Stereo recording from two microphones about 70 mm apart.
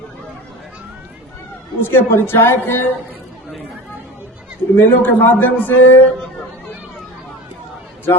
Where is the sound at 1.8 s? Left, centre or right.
Left.